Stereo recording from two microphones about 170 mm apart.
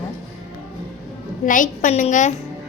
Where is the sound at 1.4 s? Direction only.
50° left (ahead or behind).